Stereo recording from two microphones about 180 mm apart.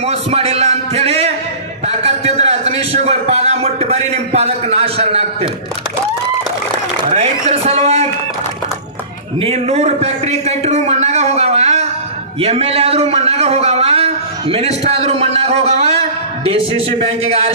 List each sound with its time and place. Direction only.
0.0 s a sound: 35° right (ahead or behind)
7.1 s a man's voice: 40° right (ahead or behind)
9.4 s a man's voice: 35° right (ahead or behind)